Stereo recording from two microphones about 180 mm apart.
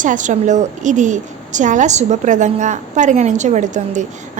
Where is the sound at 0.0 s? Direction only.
45° right (ahead or behind).